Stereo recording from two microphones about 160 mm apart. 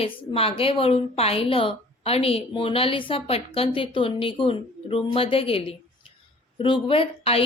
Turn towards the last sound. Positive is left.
turn(degrees=35)  # may be behind; listen again after turning